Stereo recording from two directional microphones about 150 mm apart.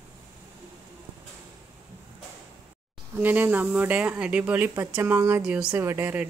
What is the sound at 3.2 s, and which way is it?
Speech, 10° right (ahead or behind).